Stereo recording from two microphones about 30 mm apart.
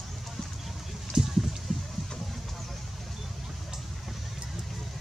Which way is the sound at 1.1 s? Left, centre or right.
Right.